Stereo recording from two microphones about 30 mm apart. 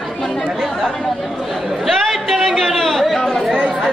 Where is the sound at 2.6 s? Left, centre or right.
Centre.